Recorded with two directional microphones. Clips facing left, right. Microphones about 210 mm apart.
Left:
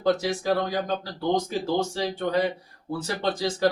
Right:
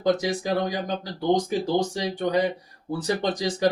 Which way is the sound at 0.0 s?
15° right (ahead or behind).